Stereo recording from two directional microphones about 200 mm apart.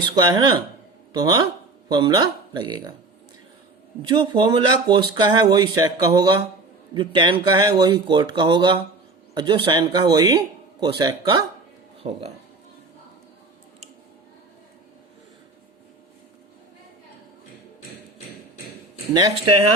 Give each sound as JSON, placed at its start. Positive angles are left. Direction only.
{"t": 0.0, "sound": "speech", "side_deg": -20}
{"t": 4.1, "sound": "speech", "side_deg": -25}
{"t": 19.1, "sound": "speech", "side_deg": -20}